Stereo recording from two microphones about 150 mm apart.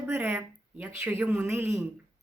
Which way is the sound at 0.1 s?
15° right (ahead or behind).